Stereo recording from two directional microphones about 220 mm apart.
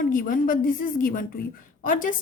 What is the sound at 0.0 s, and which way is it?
A woman's voice, 40° left (ahead or behind).